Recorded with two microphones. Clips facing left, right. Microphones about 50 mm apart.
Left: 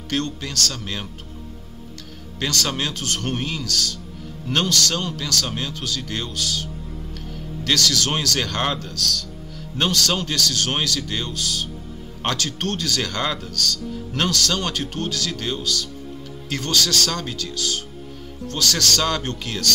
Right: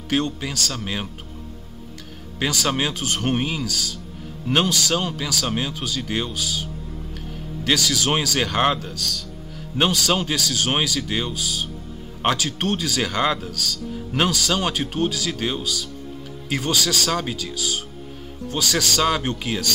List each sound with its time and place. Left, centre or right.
0.1 s speech: centre
2.4 s speech: centre